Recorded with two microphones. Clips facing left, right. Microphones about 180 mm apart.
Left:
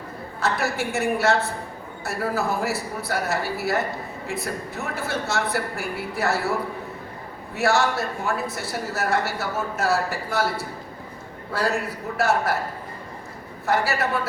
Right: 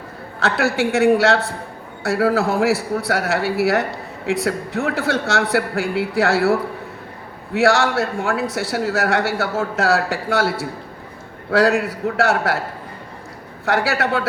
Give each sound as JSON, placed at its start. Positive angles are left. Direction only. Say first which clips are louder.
{"t": 0.3, "sound": "a man's voice", "louder": "right 6 dB", "side_deg": -75}
{"t": 7.5, "sound": "a man's voice", "louder": "right 5 dB", "side_deg": -90}
{"t": 13.7, "sound": "a man's voice", "louder": "right 4 dB", "side_deg": -75}